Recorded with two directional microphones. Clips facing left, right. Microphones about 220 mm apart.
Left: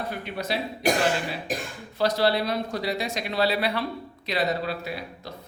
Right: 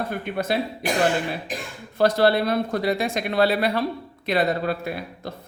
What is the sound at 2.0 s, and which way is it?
Speech, 55° right (ahead or behind).